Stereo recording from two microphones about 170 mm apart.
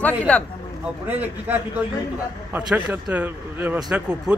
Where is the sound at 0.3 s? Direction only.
5° left (ahead or behind).